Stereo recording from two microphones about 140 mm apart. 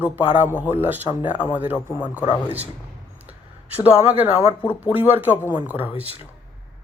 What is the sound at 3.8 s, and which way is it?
Speech, 15° right (ahead or behind).